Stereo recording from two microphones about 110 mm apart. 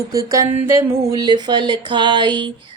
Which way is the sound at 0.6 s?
25° right (ahead or behind).